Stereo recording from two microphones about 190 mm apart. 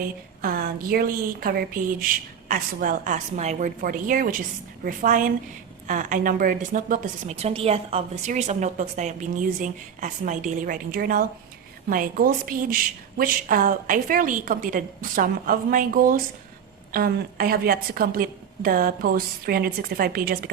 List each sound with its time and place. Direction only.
0.4 s a woman's voice: 50° right (ahead or behind)